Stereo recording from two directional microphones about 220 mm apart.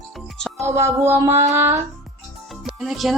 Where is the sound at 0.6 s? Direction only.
10° right (ahead or behind).